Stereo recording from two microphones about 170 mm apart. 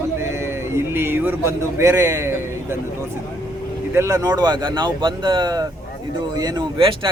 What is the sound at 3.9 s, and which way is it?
Speech, 15° right (ahead or behind).